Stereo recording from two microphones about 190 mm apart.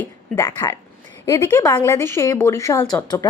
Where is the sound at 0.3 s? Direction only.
15° left (ahead or behind).